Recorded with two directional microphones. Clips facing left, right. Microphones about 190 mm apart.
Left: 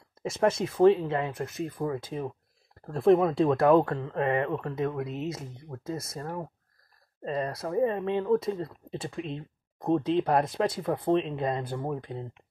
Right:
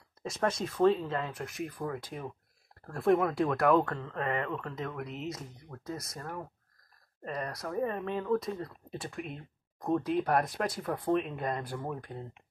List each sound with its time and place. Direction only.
0.2 s speech: 25° left (ahead or behind)